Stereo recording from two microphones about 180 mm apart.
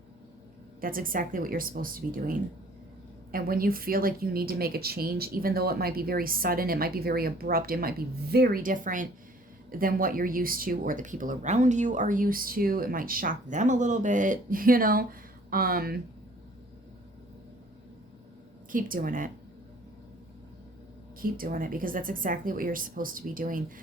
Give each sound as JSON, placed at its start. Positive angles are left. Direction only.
{"t": 0.8, "sound": "speech", "side_deg": -50}
{"t": 3.3, "sound": "speech", "side_deg": -55}
{"t": 18.7, "sound": "speech", "side_deg": -50}
{"t": 21.2, "sound": "speech", "side_deg": -50}